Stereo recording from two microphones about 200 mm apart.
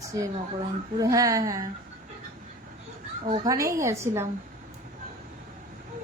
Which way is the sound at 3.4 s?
15° right (ahead or behind).